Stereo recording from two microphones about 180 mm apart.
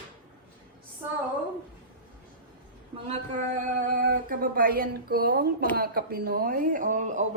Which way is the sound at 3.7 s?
50° right (ahead or behind).